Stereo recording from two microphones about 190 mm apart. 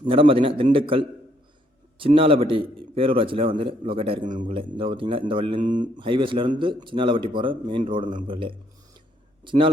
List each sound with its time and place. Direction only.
0.1 s a man's voice: 30° right (ahead or behind)
4.3 s a man's voice: 40° right (ahead or behind)
4.5 s a man's voice: 25° right (ahead or behind)